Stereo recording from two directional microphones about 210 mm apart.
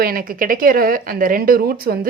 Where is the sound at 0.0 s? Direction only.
45° right (ahead or behind).